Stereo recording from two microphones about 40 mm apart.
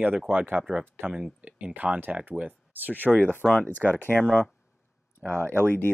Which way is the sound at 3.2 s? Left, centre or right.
Left.